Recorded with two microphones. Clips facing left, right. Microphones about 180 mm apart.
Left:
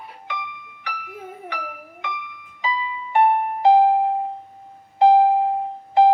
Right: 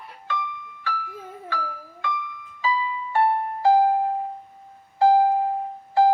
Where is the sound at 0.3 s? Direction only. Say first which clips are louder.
Right 4 dB; 20° left (ahead or behind).